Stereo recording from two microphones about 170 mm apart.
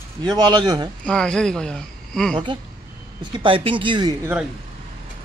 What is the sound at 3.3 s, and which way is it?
Speech, 30° right (ahead or behind).